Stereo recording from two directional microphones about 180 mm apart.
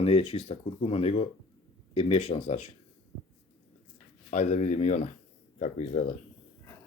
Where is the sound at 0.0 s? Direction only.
35° left (ahead or behind).